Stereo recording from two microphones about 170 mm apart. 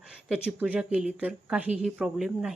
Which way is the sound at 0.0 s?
5° right (ahead or behind).